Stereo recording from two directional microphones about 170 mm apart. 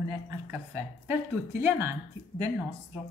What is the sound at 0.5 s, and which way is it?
Speech, 10° right (ahead or behind).